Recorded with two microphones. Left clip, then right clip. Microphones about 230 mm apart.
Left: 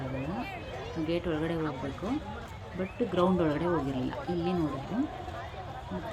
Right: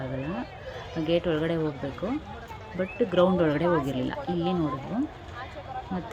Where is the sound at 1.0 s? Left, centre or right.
Centre.